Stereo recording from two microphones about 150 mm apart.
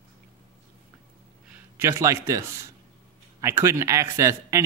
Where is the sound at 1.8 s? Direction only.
20° right (ahead or behind).